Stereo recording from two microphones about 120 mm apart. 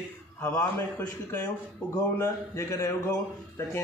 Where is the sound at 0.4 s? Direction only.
10° left (ahead or behind).